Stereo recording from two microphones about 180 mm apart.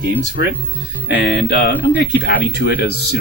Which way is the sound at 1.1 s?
65° left (ahead or behind).